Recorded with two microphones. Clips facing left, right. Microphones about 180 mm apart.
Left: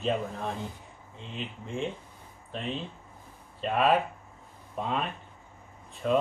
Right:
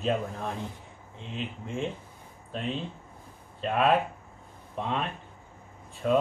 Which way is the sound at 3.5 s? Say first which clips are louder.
Even; centre (ahead or behind).